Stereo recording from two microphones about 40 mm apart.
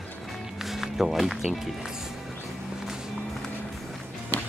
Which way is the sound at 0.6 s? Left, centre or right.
Centre.